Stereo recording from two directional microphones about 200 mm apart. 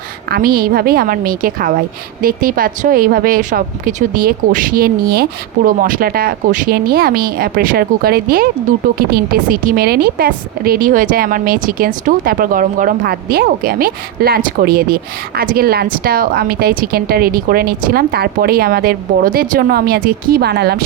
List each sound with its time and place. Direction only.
0.3 s a woman's voice: 50° right (ahead or behind)